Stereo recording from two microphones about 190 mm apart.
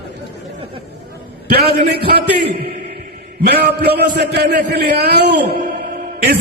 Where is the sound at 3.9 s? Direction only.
60° right (ahead or behind).